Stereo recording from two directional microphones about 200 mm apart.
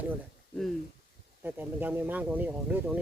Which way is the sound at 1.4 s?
10° right (ahead or behind).